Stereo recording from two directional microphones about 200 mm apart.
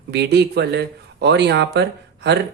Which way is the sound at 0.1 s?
55° right (ahead or behind).